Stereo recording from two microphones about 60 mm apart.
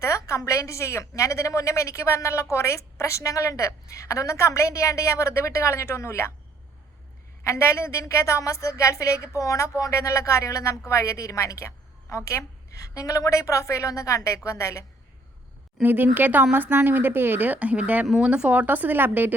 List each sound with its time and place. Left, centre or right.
0.0 s a woman's voice: left
7.4 s a woman's voice: left
15.8 s speech: right